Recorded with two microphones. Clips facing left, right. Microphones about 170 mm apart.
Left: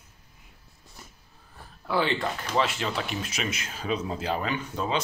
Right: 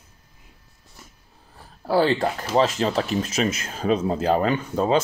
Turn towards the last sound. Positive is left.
turn(degrees=-45)  # may be behind; listen again after turning